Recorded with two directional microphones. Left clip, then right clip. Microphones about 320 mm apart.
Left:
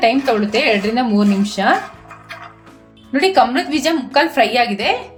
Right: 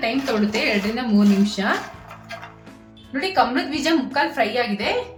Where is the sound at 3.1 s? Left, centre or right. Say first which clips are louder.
Left 7 dB; left.